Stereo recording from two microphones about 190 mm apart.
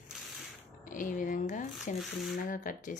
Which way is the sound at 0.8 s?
45° left (ahead or behind).